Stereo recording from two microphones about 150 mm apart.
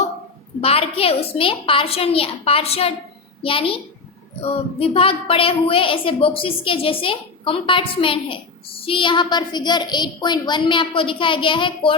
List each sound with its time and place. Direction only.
0.6 s a woman's voice: 40° left (ahead or behind)